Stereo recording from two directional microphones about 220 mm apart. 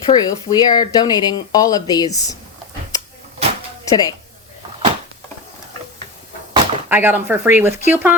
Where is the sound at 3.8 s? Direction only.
15° left (ahead or behind).